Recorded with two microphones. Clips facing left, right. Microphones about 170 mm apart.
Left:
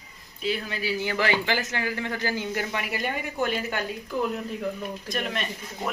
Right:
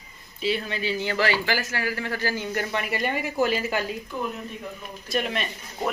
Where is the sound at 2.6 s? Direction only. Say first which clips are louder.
Right 3 dB; centre (ahead or behind).